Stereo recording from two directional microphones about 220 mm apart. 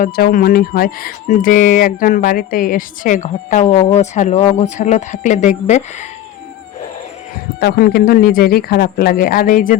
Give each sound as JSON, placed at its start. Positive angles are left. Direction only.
{"t": 0.0, "sound": "speech", "side_deg": 40}
{"t": 7.6, "sound": "speech", "side_deg": 45}